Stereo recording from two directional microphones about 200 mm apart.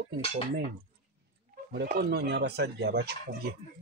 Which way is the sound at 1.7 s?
50° right (ahead or behind).